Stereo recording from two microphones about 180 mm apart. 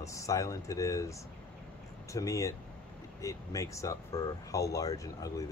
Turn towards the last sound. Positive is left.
turn(degrees=20)  # may be behind; listen again after turning